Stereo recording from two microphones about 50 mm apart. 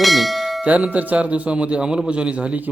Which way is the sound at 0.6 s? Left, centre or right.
Right.